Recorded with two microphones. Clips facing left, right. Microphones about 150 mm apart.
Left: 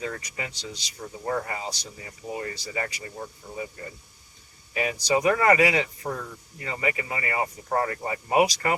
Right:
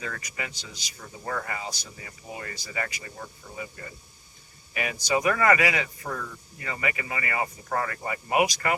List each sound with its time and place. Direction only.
0.0 s speech: 25° left (ahead or behind)
4.7 s speech: 30° left (ahead or behind)